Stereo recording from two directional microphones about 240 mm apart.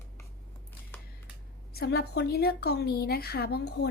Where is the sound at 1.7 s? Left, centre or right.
Left.